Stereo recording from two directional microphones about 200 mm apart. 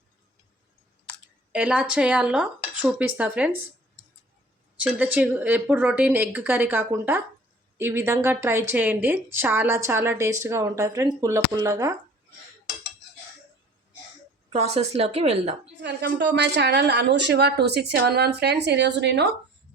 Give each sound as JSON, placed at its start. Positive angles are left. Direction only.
{"t": 1.5, "sound": "speech", "side_deg": -5}
{"t": 4.8, "sound": "a woman's voice", "side_deg": -5}
{"t": 14.5, "sound": "a woman's voice", "side_deg": -30}
{"t": 15.8, "sound": "speech", "side_deg": -55}